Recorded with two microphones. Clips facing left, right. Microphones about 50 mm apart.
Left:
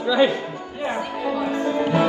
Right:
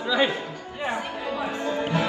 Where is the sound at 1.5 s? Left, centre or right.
Left.